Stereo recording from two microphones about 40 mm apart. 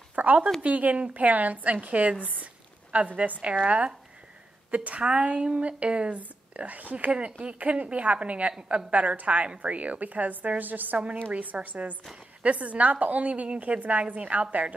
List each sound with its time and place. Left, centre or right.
0.1 s a sound: right
0.6 s a woman's voice: right
11.3 s a woman's voice: right